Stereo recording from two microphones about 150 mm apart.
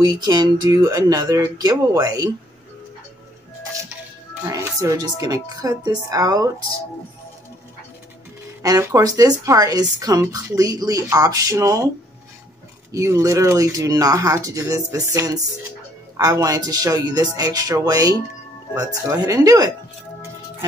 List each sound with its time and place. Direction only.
0.0 s speech: 25° right (ahead or behind)
4.5 s speech: 20° right (ahead or behind)
8.6 s speech: 20° right (ahead or behind)
12.9 s speech: 20° right (ahead or behind)